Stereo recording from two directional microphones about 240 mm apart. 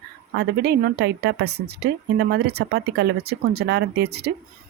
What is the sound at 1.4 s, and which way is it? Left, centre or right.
Speech, right.